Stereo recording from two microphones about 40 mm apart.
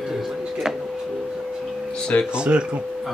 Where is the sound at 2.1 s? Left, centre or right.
Left.